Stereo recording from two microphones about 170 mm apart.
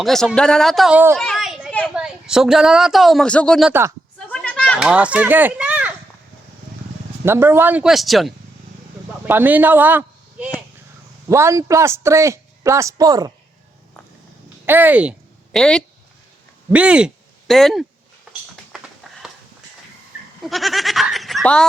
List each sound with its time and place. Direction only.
0.0 s speech: centre (ahead or behind)
1.1 s children playing: 5° left (ahead or behind)
1.9 s a woman's voice: 5° right (ahead or behind)
3.7 s a woman's voice: 15° right (ahead or behind)
4.3 s a sound: 5° left (ahead or behind)
4.8 s speech: 5° right (ahead or behind)
7.3 s a woman's voice: 15° right (ahead or behind)
9.2 s a woman's voice: 10° right (ahead or behind)
11.3 s a woman's voice: 15° right (ahead or behind)
14.7 s a woman's voice: 10° right (ahead or behind)
15.5 s speech: 5° left (ahead or behind)
16.7 s a woman's voice: 5° right (ahead or behind)
18.7 s typing: 5° right (ahead or behind)
20.4 s goat: centre (ahead or behind)